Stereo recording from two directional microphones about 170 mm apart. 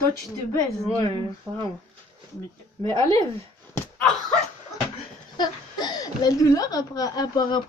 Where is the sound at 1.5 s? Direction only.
15° right (ahead or behind).